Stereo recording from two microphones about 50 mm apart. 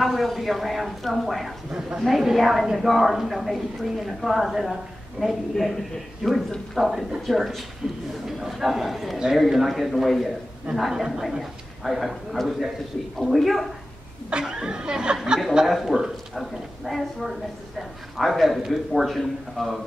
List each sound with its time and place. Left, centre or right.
0.0 s a woman's voice: centre
1.7 s speech: centre
2.0 s a woman's voice: centre
14.3 s speech: centre
15.6 s a woman's voice: centre
15.9 s speech: centre
16.8 s a woman's voice: centre